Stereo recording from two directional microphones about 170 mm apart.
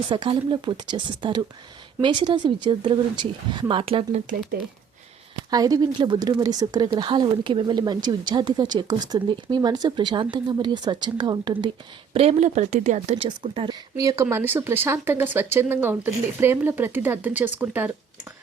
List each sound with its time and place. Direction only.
0.1 s speech: 30° right (ahead or behind)
5.5 s speech: 20° right (ahead or behind)